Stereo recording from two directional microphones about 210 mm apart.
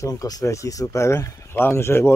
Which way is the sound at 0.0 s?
15° left (ahead or behind).